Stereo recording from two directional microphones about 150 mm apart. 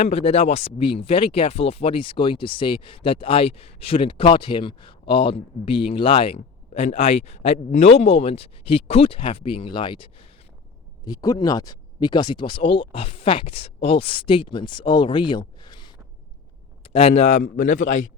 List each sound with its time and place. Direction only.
0.0 s speech: 40° left (ahead or behind)
11.0 s a man's voice: 25° left (ahead or behind); by 17.8 s 60° left (ahead or behind)